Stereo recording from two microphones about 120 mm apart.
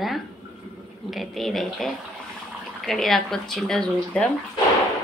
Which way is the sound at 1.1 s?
Centre (ahead or behind).